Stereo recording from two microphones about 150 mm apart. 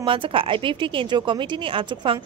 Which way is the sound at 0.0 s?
35° right (ahead or behind).